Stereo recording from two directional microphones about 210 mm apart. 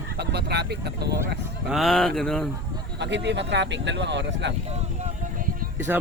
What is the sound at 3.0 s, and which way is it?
Speech, 55° right (ahead or behind).